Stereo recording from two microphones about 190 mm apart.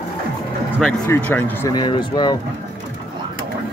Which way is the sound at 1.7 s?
25° left (ahead or behind).